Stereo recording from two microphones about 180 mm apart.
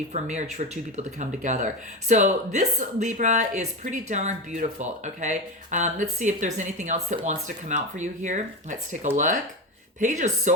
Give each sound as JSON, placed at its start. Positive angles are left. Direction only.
{"t": 0.1, "sound": "speech", "side_deg": -40}